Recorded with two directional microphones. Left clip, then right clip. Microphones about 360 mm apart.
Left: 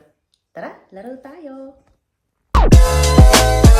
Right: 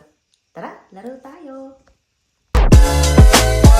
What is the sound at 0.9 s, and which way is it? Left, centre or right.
Speech, centre.